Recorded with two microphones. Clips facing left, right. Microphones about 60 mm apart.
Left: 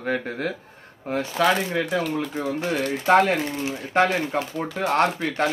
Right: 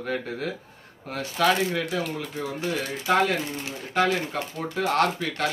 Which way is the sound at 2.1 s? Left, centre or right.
Left.